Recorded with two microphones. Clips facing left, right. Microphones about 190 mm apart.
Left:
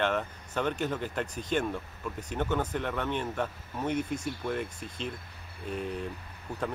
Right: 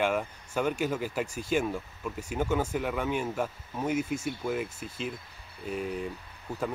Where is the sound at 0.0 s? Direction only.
10° right (ahead or behind).